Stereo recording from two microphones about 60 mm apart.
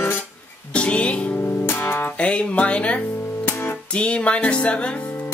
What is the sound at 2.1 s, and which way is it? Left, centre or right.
Music, centre.